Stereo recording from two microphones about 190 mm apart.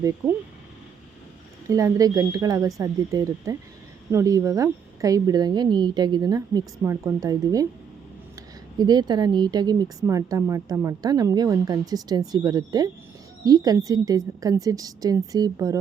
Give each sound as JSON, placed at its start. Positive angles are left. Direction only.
{"t": 1.7, "sound": "a woman's voice", "side_deg": -15}
{"t": 8.8, "sound": "speech", "side_deg": -20}